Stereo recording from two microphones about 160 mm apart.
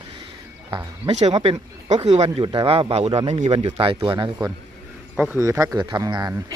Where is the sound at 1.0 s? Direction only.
40° right (ahead or behind).